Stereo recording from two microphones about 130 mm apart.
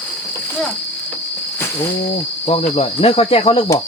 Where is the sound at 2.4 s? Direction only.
50° left (ahead or behind).